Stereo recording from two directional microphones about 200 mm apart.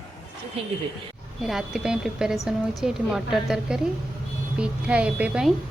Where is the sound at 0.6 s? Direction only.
30° right (ahead or behind).